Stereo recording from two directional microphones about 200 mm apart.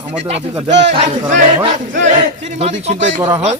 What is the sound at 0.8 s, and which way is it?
Battle cry, 35° right (ahead or behind).